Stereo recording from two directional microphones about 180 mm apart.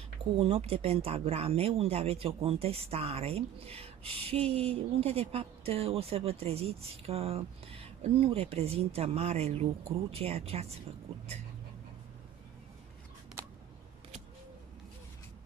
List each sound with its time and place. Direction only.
0.4 s speech: 35° right (ahead or behind)